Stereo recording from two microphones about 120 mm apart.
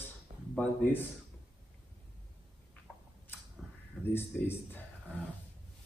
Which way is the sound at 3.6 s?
Centre (ahead or behind).